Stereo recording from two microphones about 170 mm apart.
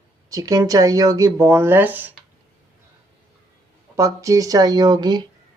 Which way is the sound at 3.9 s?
20° right (ahead or behind).